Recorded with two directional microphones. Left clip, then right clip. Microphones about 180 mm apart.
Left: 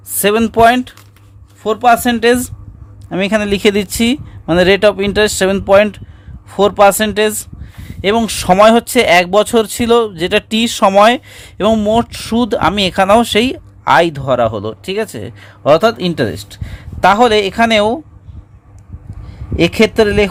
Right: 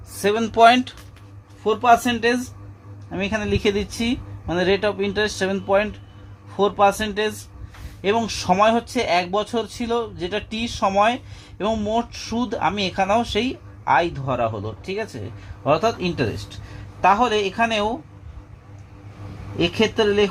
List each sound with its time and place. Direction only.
0.2 s speech: 65° left (ahead or behind); by 0.9 s 40° left (ahead or behind)
1.6 s speech: 75° left (ahead or behind)
17.0 s speech: 85° left
19.5 s speech: 90° left